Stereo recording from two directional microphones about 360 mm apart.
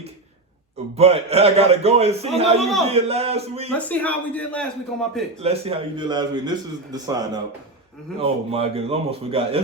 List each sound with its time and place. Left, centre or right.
0.9 s a man's voice: centre
2.6 s a man's voice: centre
2.8 s a man's voice: centre
3.7 s a man's voice: centre
5.4 s a man's voice: centre